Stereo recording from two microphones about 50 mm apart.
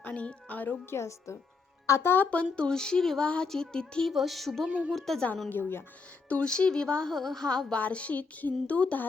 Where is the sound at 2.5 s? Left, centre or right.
Centre.